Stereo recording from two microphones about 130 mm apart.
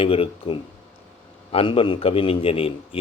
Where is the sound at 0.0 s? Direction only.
45° left (ahead or behind).